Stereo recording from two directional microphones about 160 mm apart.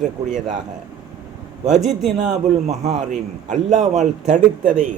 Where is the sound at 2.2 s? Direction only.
45° right (ahead or behind).